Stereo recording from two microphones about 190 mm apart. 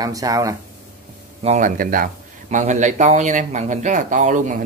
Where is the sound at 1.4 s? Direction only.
40° right (ahead or behind).